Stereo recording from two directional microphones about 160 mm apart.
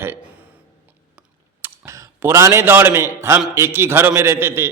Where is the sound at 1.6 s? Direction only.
20° right (ahead or behind).